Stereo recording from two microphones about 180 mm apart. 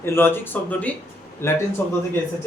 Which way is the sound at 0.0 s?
15° left (ahead or behind).